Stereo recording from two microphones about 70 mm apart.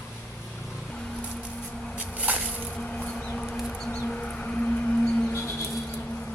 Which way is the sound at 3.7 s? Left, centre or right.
Centre.